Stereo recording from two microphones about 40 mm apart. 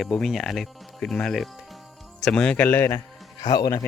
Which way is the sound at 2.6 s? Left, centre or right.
Left.